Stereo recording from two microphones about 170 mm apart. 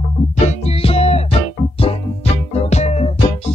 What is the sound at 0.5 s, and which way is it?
Music, 35° left (ahead or behind).